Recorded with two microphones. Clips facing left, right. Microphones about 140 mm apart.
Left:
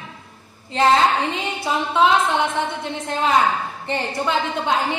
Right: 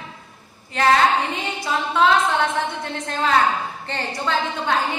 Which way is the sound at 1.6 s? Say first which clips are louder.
Left 1 dB; 20° left (ahead or behind).